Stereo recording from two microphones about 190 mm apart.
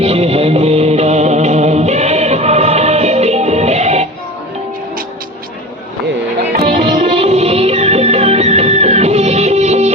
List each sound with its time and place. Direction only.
0.0 s music: 30° right (ahead or behind)
6.7 s music: 30° right (ahead or behind)